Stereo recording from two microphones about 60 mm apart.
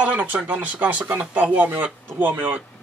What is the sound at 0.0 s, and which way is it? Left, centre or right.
Speech, right.